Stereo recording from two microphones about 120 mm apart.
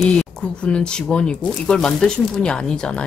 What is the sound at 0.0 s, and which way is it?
Speech, 5° left (ahead or behind).